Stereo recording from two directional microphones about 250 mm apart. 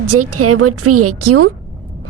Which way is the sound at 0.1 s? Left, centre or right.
Right.